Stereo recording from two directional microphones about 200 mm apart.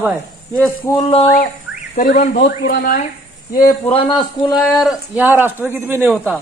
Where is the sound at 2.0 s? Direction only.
40° left (ahead or behind).